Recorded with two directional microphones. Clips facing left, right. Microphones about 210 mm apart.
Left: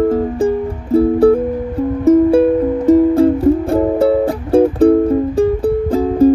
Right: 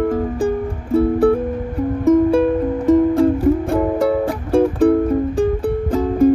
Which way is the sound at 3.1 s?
30° left (ahead or behind).